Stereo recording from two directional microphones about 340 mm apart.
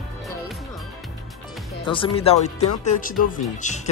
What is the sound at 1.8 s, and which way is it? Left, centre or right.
Speech, centre.